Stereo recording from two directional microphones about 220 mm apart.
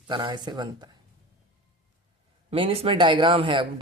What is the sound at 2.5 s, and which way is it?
A woman's voice, 25° right (ahead or behind).